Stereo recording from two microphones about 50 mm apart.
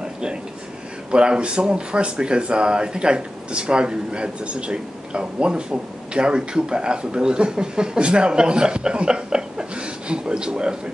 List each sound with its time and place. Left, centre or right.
1.1 s speech: centre